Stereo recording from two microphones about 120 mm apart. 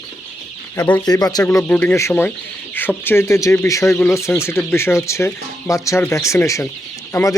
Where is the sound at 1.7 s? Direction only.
15° left (ahead or behind).